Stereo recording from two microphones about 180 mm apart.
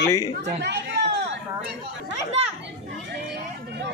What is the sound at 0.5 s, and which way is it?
Chatter, 75° right (ahead or behind).